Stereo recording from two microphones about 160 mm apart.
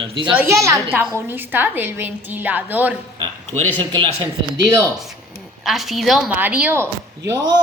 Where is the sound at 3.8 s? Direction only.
30° right (ahead or behind).